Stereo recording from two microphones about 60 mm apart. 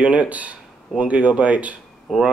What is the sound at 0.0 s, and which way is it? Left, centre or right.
Speech, right.